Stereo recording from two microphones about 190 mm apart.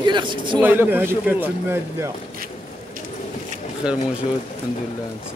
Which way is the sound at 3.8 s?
5° right (ahead or behind).